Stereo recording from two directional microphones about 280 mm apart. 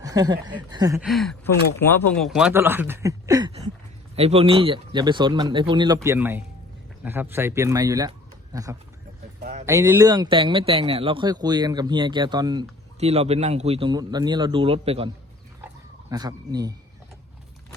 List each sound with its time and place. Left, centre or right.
0.0 s speech: centre
0.9 s speech: centre; by 15.1 s right
15.6 s dog: centre